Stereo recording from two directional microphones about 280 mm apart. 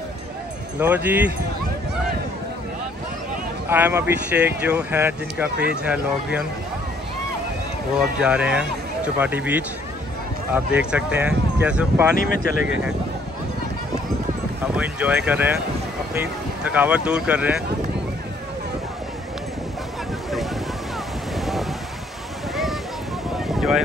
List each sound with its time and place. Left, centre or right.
0.7 s speech: centre
3.6 s speech: centre
7.9 s speech: centre
12.2 s speech: left
12.6 s speech: centre
14.6 s boat: centre
16.7 s speech: centre
21.4 s a sound: centre
23.4 s boat: centre